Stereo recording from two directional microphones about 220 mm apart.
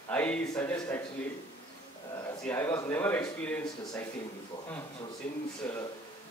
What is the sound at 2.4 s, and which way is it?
Speech, 10° left (ahead or behind).